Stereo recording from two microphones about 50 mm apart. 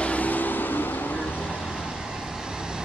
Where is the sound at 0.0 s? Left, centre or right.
Left.